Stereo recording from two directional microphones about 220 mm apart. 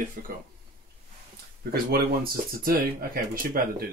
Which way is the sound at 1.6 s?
45° right (ahead or behind).